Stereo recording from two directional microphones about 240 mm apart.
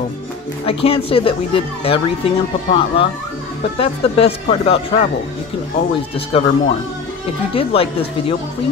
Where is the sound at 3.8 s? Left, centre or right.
Left.